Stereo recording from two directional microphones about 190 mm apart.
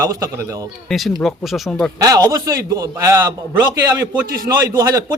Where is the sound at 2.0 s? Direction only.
20° right (ahead or behind).